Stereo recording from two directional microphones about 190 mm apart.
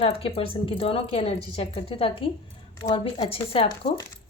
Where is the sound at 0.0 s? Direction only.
30° left (ahead or behind).